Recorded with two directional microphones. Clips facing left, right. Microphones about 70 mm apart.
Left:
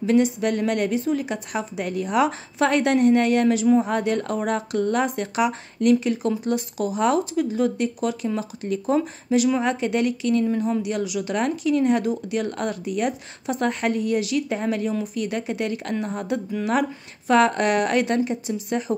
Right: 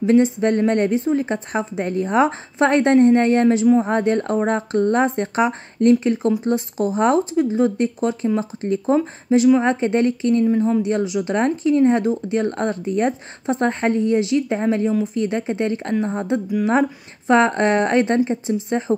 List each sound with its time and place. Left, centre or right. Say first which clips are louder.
0.0 s speech: right 4 dB; right